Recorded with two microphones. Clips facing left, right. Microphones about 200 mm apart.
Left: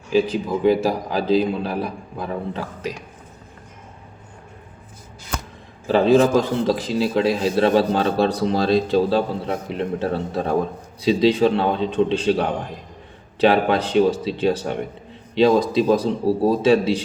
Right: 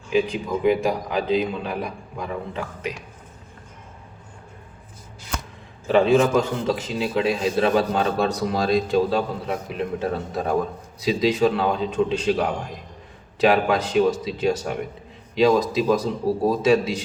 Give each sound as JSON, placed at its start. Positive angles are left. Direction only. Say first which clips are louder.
{"t": 0.1, "sound": "a man's voice", "louder": "left 3 dB", "side_deg": 35}
{"t": 5.9, "sound": "a man's voice", "louder": "left 2 dB", "side_deg": 35}